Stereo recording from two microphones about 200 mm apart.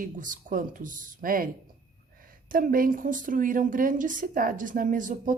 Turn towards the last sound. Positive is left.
turn(degrees=-40)  # may be behind; listen again after turning